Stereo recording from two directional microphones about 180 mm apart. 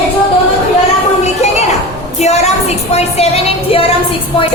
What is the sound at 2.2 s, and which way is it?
A woman's voice, 35° left (ahead or behind).